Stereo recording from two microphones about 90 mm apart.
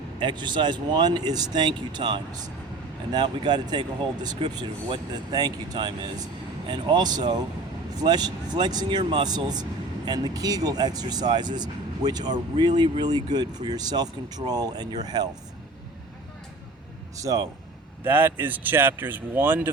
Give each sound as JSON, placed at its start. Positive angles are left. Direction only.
{"t": 0.2, "sound": "speech", "side_deg": -60}
{"t": 17.2, "sound": "speech", "side_deg": -40}
{"t": 18.0, "sound": "speech", "side_deg": -25}